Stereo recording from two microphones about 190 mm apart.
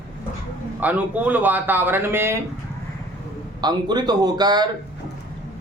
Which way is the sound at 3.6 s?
20° right (ahead or behind).